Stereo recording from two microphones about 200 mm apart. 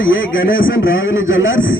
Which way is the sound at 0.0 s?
75° left (ahead or behind).